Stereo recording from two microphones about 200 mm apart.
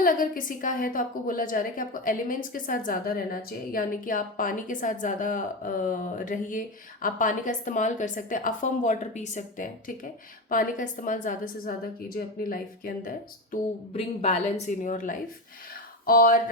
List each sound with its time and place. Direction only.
0.0 s a woman's voice: 45° left (ahead or behind)
13.9 s a woman's voice: 30° left (ahead or behind)